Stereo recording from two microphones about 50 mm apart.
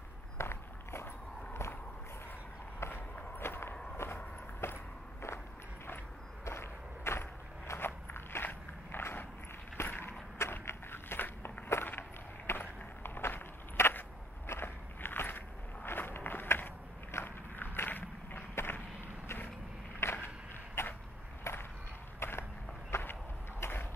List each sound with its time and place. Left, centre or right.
0.4 s walk: left
2.8 s walk: left
3.3 s walk: left
6.4 s walk: left
9.8 s skateboard: left
10.5 s walk: left
20.0 s a sound: left
21.5 s a sound: left
22.2 s skateboard: left
22.8 s walk: left
23.6 s a sound: left